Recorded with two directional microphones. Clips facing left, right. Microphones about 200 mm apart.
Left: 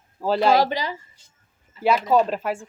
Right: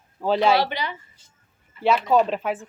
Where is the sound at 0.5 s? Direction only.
40° left (ahead or behind).